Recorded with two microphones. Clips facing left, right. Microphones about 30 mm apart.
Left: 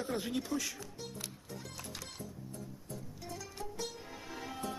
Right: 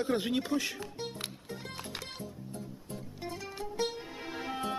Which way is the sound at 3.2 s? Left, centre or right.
Right.